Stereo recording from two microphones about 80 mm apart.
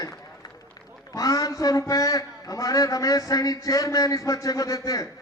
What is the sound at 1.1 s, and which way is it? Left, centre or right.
A man's voice, left.